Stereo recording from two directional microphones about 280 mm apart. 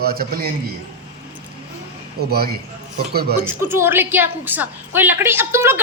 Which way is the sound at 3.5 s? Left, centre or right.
Centre.